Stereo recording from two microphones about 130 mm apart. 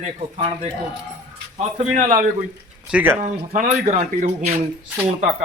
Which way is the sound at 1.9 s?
90° right.